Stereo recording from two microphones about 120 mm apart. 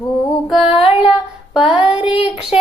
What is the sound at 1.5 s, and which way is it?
Female singing, 5° right (ahead or behind).